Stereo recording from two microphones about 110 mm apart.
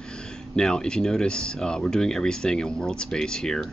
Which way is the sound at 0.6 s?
5° left (ahead or behind).